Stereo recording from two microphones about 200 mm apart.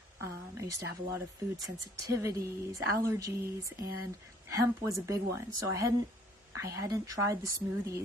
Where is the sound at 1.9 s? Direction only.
15° right (ahead or behind).